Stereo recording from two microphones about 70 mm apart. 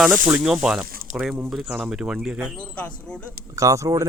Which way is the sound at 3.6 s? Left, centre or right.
Right.